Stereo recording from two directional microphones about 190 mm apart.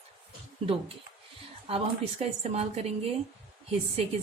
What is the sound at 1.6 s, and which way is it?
Speech, 30° right (ahead or behind).